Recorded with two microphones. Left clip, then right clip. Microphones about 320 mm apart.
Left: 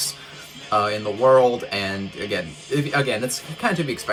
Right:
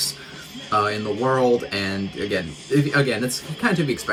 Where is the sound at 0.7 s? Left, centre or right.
Centre.